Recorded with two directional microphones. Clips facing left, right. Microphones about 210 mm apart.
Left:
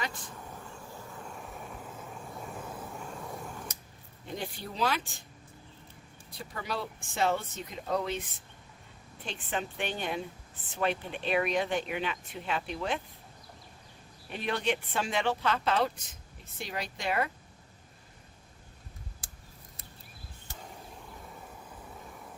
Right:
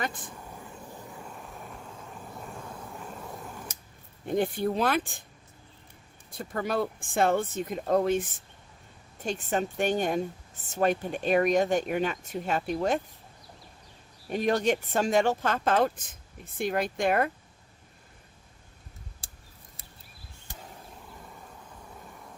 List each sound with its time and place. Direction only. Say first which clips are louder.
0.0 s speech: right 4 dB; 50° right (ahead or behind)
1.2 s vehicle: even; centre (ahead or behind)
4.3 s speech: right 12 dB; 50° right (ahead or behind)
6.3 s speech: right 8 dB; 50° right (ahead or behind)
14.3 s speech: right 6 dB; 40° right (ahead or behind)